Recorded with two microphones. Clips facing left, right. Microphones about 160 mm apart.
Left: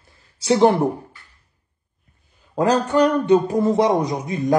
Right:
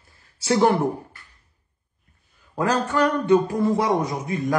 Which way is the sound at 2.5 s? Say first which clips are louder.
Left 5 dB; 20° left (ahead or behind).